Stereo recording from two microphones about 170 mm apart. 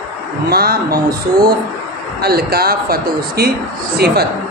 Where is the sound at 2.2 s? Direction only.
65° right (ahead or behind).